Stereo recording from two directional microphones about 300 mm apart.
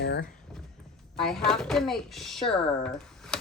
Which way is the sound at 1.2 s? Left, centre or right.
Centre.